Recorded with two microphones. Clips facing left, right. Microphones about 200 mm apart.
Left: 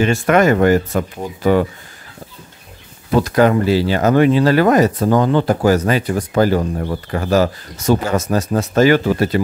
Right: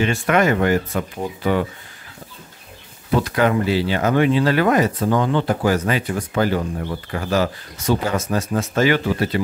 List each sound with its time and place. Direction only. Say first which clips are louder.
0.0 s speech: left 4 dB; 45° left (ahead or behind)
3.2 s speech: left 5 dB; 40° left (ahead or behind)